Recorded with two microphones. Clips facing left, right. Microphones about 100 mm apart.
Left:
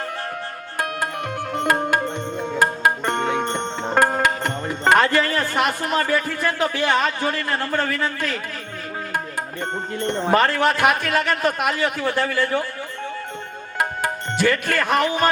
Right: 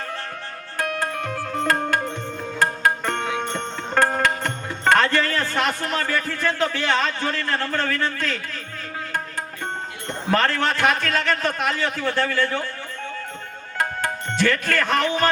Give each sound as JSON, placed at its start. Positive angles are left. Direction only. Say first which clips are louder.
{"t": 0.8, "sound": "music", "louder": "even", "side_deg": 15}
{"t": 3.9, "sound": "speech", "louder": "left 1 dB", "side_deg": 15}
{"t": 10.3, "sound": "a man's voice", "louder": "left 2 dB", "side_deg": 15}
{"t": 13.7, "sound": "music", "louder": "left 1 dB", "side_deg": 15}